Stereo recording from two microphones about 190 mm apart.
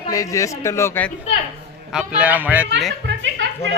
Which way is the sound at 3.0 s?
75° right (ahead or behind).